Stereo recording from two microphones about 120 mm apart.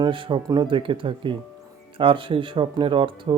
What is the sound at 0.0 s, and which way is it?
Speech, 45° right (ahead or behind).